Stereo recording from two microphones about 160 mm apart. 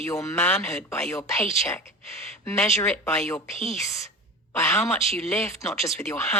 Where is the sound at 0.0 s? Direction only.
20° left (ahead or behind).